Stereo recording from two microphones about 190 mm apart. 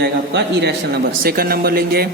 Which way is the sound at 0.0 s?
60° right (ahead or behind).